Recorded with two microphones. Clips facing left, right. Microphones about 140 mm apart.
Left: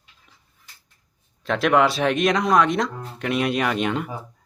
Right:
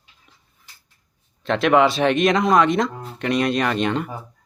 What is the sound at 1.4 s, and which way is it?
Speech, centre (ahead or behind).